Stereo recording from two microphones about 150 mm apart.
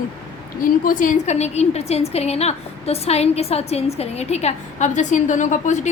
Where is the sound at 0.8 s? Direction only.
60° left (ahead or behind).